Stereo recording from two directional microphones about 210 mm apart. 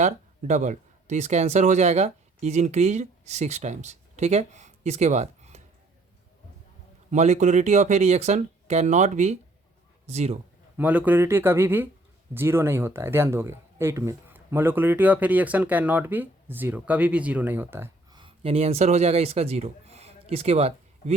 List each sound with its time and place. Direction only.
0.0 s speech: 35° right (ahead or behind)
7.1 s speech: 35° right (ahead or behind)
10.8 s speech: 5° right (ahead or behind)
18.2 s speech: 25° right (ahead or behind)